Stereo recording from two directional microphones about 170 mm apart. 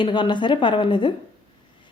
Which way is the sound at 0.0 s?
25° left (ahead or behind).